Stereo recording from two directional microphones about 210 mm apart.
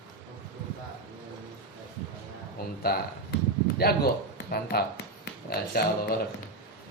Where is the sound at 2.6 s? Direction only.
45° left (ahead or behind).